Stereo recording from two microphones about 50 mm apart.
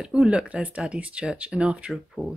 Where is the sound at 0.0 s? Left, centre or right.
Centre.